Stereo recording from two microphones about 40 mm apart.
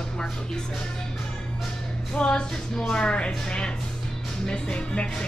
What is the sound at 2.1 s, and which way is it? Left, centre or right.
A woman's voice, left.